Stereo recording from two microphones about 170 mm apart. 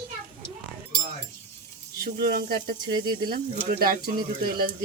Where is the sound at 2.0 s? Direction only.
60° right (ahead or behind).